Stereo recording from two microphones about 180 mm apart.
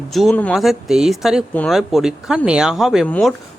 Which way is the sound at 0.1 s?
Centre (ahead or behind).